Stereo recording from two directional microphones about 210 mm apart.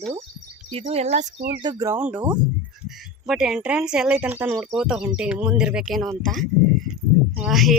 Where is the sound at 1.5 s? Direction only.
20° right (ahead or behind).